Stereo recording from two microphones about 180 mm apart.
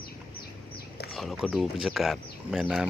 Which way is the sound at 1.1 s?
Centre (ahead or behind).